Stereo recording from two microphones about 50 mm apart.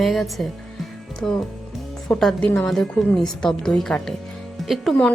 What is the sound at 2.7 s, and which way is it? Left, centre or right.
A woman's voice, centre.